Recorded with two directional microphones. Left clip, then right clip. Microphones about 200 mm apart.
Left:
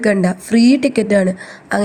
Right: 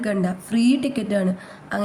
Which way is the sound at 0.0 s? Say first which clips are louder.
Left 9 dB; 35° left (ahead or behind).